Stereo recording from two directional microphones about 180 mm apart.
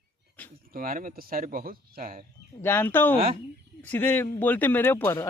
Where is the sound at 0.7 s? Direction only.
55° right (ahead or behind).